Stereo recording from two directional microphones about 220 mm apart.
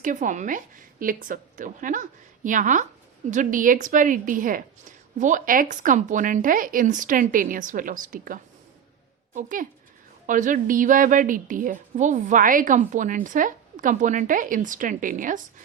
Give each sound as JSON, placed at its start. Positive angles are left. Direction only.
{"t": 0.0, "sound": "a woman's voice", "side_deg": -35}